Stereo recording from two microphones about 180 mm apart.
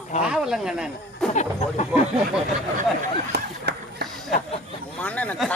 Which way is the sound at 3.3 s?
70° right (ahead or behind).